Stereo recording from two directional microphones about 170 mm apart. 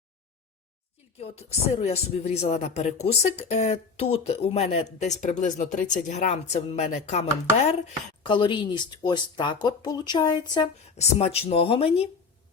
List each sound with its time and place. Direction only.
1.8 s speech: 35° left (ahead or behind)
8.2 s speech: 30° left (ahead or behind)
10.9 s speech: 35° left (ahead or behind)